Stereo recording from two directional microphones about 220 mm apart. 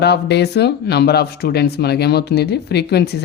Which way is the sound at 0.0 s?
50° left (ahead or behind).